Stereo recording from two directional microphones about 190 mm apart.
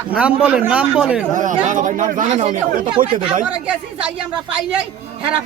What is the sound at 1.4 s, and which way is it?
Speech, 40° right (ahead or behind).